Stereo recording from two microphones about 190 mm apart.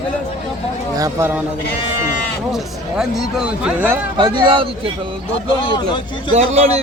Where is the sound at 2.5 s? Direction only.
Centre (ahead or behind).